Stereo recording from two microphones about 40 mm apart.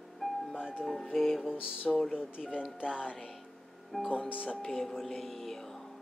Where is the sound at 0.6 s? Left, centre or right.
Right.